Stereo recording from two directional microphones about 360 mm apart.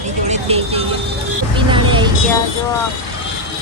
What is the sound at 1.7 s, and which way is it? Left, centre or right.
Vehicle, centre.